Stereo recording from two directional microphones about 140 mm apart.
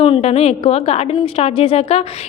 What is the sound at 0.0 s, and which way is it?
A woman's voice, 45° left (ahead or behind).